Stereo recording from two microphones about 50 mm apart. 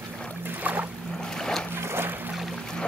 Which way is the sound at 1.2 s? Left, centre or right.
Centre.